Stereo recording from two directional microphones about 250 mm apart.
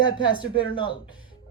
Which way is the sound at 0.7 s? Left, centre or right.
Centre.